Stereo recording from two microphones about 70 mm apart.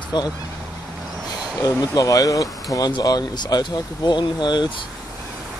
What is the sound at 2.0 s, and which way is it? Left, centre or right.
Speech, left.